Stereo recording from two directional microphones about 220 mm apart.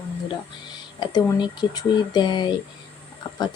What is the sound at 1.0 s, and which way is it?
Speech, 20° left (ahead or behind).